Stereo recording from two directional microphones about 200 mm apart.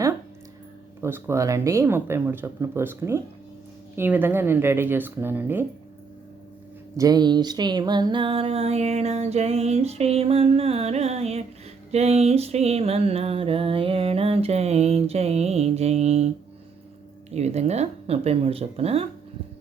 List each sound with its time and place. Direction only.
1.0 s speech: 15° right (ahead or behind)
6.9 s music: 20° right (ahead or behind); by 16.3 s 35° right (ahead or behind)
17.3 s music: 35° right (ahead or behind)